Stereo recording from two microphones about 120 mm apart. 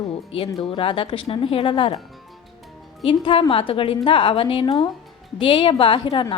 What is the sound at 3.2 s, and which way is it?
Speech, 45° left (ahead or behind).